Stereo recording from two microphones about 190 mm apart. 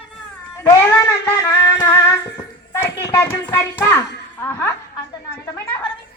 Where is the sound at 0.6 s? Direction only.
15° left (ahead or behind).